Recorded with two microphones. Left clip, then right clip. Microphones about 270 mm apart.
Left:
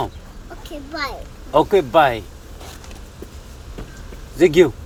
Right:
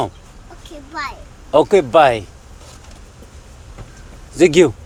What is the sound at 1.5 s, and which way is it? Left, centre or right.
Speech, right.